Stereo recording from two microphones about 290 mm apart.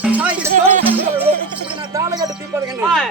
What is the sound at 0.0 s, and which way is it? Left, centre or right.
Music, centre.